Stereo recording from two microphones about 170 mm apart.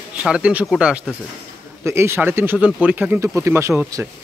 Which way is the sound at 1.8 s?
15° right (ahead or behind).